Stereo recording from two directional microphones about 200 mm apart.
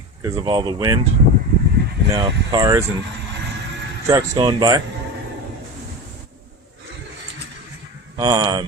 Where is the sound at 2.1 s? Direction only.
20° right (ahead or behind).